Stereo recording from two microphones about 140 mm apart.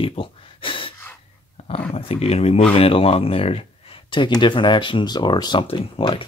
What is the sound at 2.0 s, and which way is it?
Speech, 45° left (ahead or behind).